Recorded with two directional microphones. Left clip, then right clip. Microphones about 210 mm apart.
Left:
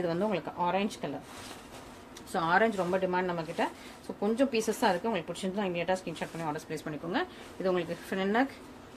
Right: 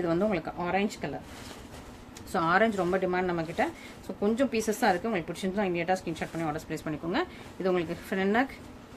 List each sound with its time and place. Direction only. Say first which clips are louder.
0.0 s a woman's voice: right 3 dB; 25° right (ahead or behind)
2.3 s a woman's voice: right 2 dB; 25° right (ahead or behind)